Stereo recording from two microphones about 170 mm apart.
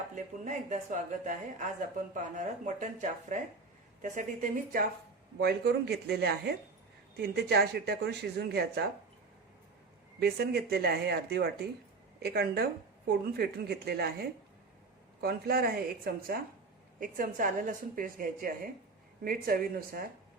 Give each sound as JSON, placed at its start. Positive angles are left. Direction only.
{"t": 0.4, "sound": "a woman's voice", "side_deg": -45}
{"t": 5.4, "sound": "speech", "side_deg": -70}
{"t": 10.2, "sound": "a woman's voice", "side_deg": -70}
{"t": 17.0, "sound": "a woman's voice", "side_deg": -50}